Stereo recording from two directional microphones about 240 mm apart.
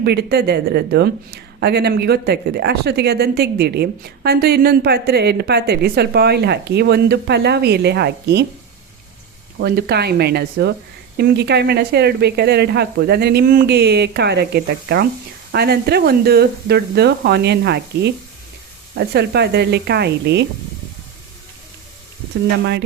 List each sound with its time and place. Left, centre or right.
0.0 s speech: right
9.6 s speech: right